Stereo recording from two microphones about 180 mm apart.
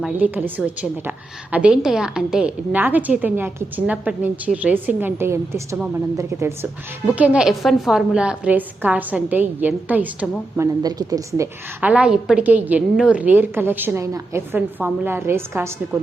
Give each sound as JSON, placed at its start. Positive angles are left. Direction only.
{"t": 0.0, "sound": "a woman's voice", "side_deg": -10}
{"t": 10.6, "sound": "a woman's voice", "side_deg": -20}